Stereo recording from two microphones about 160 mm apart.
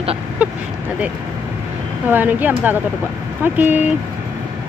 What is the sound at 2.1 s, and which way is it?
Speech, 10° right (ahead or behind).